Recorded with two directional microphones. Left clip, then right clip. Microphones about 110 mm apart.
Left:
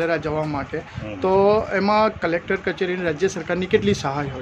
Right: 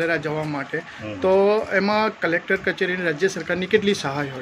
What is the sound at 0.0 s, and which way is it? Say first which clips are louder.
Speech: left 1 dB; 10° left (ahead or behind).